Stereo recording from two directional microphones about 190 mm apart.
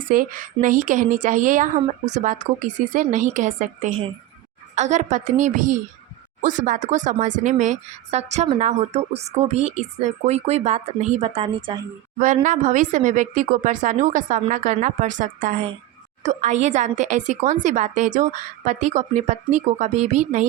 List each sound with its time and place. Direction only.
0.1 s speech: 45° right (ahead or behind); by 11.8 s 25° right (ahead or behind)
12.2 s speech: 45° right (ahead or behind)